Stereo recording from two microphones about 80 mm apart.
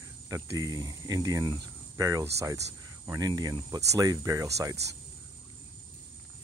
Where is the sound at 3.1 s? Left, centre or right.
Right.